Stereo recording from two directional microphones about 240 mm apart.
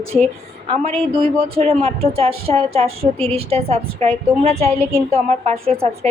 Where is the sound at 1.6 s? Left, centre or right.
Right.